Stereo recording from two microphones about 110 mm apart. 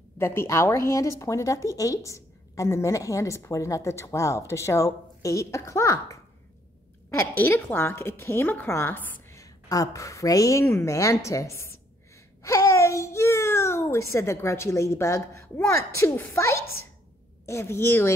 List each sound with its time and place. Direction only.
0.2 s speech: 25° left (ahead or behind)
7.2 s speech: 20° left (ahead or behind)
9.4 s a child's voice: 30° left (ahead or behind)